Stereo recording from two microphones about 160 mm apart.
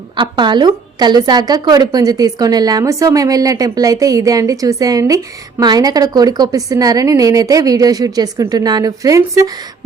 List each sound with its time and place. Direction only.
0.2 s a woman's voice: 30° right (ahead or behind)